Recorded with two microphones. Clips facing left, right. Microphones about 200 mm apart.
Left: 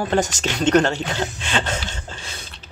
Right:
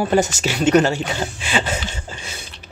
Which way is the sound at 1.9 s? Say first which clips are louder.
Right 2 dB; 10° right (ahead or behind).